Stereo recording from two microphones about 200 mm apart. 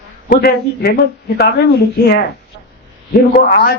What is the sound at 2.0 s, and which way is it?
Speech, 50° left (ahead or behind).